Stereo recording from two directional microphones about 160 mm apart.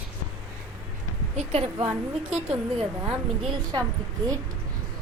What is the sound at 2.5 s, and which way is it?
Speech, 5° right (ahead or behind).